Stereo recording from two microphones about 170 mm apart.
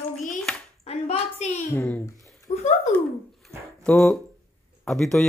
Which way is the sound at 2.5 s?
40° left (ahead or behind).